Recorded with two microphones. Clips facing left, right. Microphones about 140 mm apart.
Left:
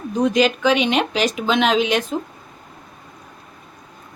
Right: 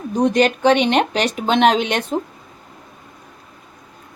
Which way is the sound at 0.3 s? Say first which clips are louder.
Right 3 dB; 65° right (ahead or behind).